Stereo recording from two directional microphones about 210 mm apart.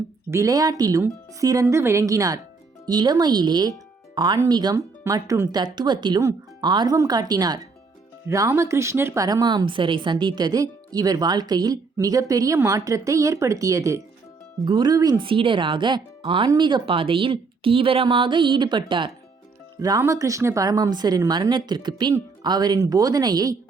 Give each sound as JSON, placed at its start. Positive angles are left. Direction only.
{"t": 0.3, "sound": "a woman's voice", "side_deg": -15}